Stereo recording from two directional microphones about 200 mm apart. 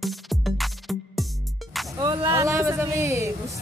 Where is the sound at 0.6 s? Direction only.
Centre (ahead or behind).